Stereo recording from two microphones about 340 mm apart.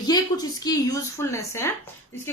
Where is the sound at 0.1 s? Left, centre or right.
Centre.